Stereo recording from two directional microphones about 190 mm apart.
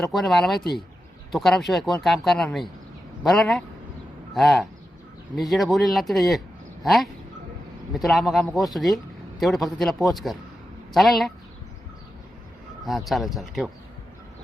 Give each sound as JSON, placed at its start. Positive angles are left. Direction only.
{"t": 0.0, "sound": "speech", "side_deg": 0}
{"t": 12.8, "sound": "speech", "side_deg": 0}